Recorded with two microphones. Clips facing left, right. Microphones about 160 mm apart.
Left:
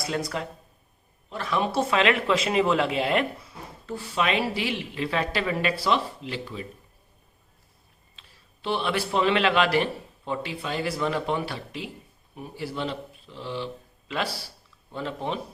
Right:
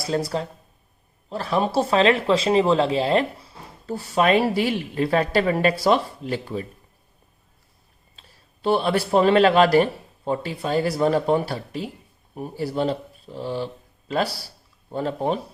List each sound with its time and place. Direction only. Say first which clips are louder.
0.0 s speech: right 5 dB; 30° right (ahead or behind)
8.2 s a sound: right 4 dB; 40° right (ahead or behind)
8.6 s speech: right 6 dB; 40° right (ahead or behind)